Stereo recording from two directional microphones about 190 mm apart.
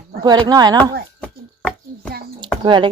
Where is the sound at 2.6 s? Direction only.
25° right (ahead or behind).